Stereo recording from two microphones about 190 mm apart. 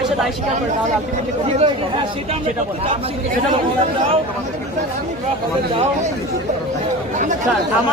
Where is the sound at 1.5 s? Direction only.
30° right (ahead or behind).